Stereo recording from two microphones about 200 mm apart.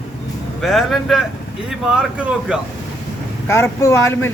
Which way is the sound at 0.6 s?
Centre (ahead or behind).